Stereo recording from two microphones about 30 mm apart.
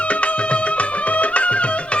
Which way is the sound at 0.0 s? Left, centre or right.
Left.